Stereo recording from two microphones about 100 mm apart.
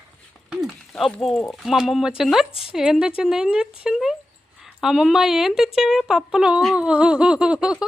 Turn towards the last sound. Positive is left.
turn(degrees=-10)  # may be behind; listen again after turning